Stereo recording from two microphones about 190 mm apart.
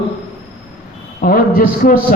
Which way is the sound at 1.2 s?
50° left (ahead or behind).